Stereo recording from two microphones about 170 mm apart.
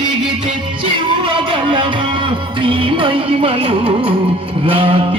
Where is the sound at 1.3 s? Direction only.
30° right (ahead or behind).